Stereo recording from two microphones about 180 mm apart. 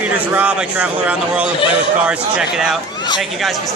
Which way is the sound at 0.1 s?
10° right (ahead or behind).